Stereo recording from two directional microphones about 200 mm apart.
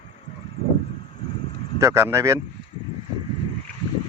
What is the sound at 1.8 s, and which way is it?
Speech, 15° right (ahead or behind).